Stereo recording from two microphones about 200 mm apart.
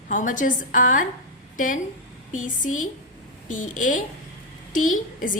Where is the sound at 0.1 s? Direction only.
40° left (ahead or behind).